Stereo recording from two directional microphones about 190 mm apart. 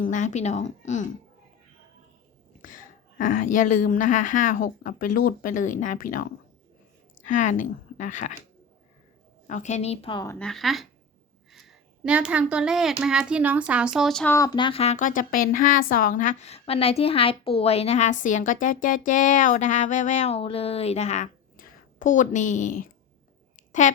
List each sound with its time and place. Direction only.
0.0 s a woman's voice: 40° left (ahead or behind)
2.6 s a woman's voice: 45° left (ahead or behind)
7.3 s a woman's voice: 40° left (ahead or behind)
9.5 s a woman's voice: 40° left (ahead or behind)
10.2 s speech: 5° left (ahead or behind)
14.3 s a woman's voice: 20° left (ahead or behind); by 24.0 s 40° left (ahead or behind)